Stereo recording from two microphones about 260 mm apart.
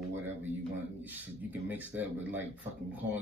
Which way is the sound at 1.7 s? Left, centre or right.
Centre.